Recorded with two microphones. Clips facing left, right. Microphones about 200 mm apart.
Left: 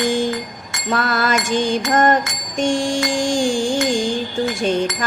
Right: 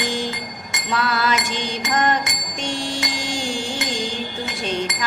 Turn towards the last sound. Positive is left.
turn(degrees=45)  # may be behind; listen again after turning